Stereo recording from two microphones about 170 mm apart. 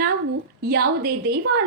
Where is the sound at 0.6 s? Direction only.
65° right (ahead or behind).